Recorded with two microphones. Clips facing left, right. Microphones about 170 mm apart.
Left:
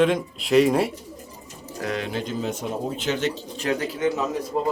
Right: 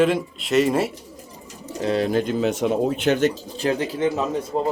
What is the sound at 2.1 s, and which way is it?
Speech, 55° right (ahead or behind).